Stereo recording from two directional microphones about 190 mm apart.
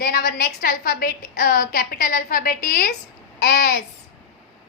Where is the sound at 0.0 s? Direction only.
50° left (ahead or behind).